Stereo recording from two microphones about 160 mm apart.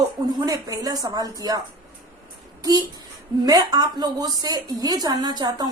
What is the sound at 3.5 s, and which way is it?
A woman's voice, 25° right (ahead or behind).